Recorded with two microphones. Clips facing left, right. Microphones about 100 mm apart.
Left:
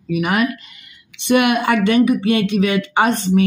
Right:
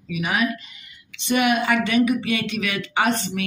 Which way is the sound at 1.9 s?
40° left (ahead or behind).